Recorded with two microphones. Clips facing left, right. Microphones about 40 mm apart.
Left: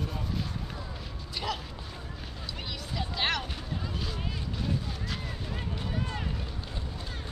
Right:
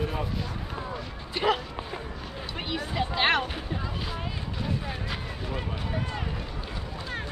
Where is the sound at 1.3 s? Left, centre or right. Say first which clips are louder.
Right 9 dB; right.